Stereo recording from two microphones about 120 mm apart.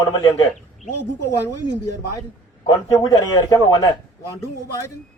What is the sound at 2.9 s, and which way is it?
A man's voice, 30° left (ahead or behind).